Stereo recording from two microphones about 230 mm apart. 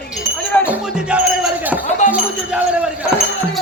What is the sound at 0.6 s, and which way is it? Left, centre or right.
Music, centre.